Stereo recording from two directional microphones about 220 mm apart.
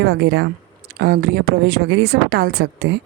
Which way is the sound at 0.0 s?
50° right (ahead or behind).